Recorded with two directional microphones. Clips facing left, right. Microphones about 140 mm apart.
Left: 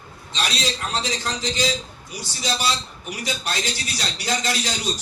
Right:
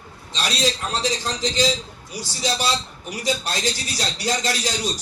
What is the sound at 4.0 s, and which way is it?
Speech, 35° right (ahead or behind).